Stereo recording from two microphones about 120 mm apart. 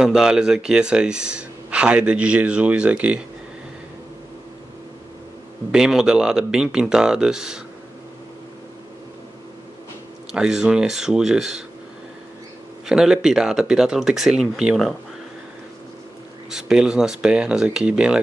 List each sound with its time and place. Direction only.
0.0 s speech: 5° right (ahead or behind)
5.7 s speech: 5° right (ahead or behind)
10.3 s speech: 5° right (ahead or behind)
12.8 s speech: 5° right (ahead or behind)
16.4 s speech: 5° right (ahead or behind)